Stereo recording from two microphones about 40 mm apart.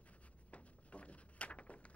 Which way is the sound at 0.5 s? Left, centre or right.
Left.